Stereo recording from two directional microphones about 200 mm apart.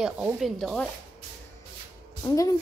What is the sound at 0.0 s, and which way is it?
Speech, centre (ahead or behind).